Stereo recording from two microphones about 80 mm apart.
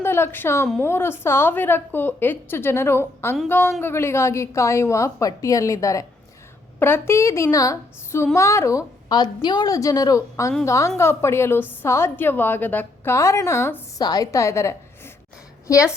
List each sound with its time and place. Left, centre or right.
0.0 s a woman's voice: left
6.7 s a woman's voice: left
9.0 s a woman's voice: left
9.6 s a woman's voice: left
13.1 s a woman's voice: left
14.0 s a woman's voice: left